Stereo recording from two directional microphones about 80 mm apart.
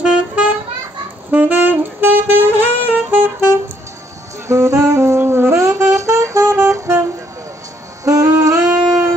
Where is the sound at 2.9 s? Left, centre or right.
Right.